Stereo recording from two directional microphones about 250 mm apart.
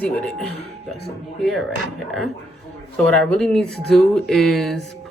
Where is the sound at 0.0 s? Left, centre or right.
Centre.